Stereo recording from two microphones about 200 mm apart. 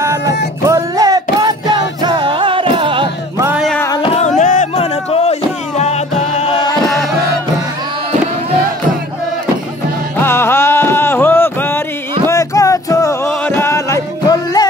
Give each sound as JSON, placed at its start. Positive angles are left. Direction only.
{"t": 0.2, "sound": "music", "side_deg": 60}
{"t": 0.7, "sound": "music", "side_deg": -15}
{"t": 3.3, "sound": "music", "side_deg": -10}
{"t": 4.4, "sound": "music", "side_deg": 40}
{"t": 10.2, "sound": "music", "side_deg": 10}